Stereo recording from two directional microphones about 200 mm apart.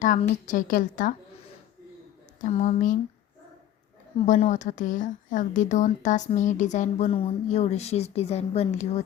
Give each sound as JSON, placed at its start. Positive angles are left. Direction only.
{"t": 0.0, "sound": "speech", "side_deg": 40}
{"t": 2.4, "sound": "speech", "side_deg": 35}
{"t": 4.3, "sound": "speech", "side_deg": 35}